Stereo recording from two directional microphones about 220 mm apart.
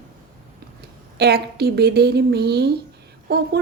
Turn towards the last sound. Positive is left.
turn(degrees=-45)  # may be behind; listen again after turning